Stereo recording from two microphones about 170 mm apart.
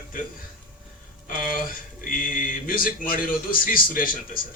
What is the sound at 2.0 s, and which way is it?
Speech, 55° left (ahead or behind).